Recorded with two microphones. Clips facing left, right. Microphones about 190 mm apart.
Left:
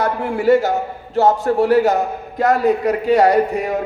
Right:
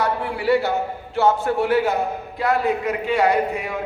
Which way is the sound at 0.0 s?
45° left (ahead or behind).